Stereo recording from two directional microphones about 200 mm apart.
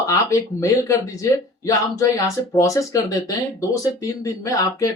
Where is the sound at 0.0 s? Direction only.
15° left (ahead or behind).